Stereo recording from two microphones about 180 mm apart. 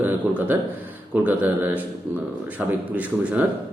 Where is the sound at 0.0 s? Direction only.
10° right (ahead or behind).